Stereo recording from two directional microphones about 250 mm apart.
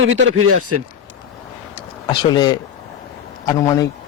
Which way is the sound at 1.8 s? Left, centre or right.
Centre.